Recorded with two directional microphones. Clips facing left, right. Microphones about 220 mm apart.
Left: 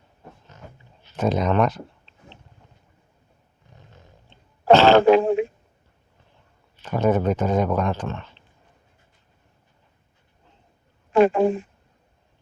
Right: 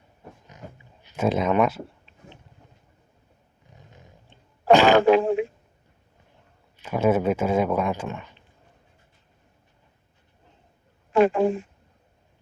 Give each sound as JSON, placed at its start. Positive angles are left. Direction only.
{"t": 0.5, "sound": "a sound", "side_deg": -15}
{"t": 1.0, "sound": "speech", "side_deg": -10}
{"t": 4.7, "sound": "throat clearing", "side_deg": -15}
{"t": 4.9, "sound": "speech", "side_deg": 40}
{"t": 6.8, "sound": "speech", "side_deg": -5}
{"t": 11.1, "sound": "speech", "side_deg": 35}